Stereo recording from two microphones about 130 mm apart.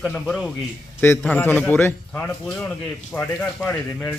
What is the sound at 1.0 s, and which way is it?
Speech, 20° left (ahead or behind).